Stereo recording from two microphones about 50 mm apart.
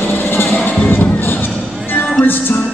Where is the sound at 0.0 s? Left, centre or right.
Left.